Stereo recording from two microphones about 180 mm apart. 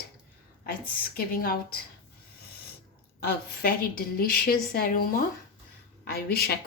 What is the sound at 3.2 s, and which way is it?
A woman's voice, 60° left (ahead or behind).